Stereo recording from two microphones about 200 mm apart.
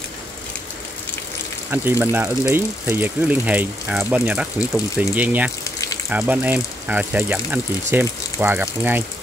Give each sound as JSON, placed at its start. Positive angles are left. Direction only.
{"t": 1.7, "sound": "speech", "side_deg": -10}
{"t": 5.6, "sound": "water", "side_deg": 15}
{"t": 6.0, "sound": "speech", "side_deg": -10}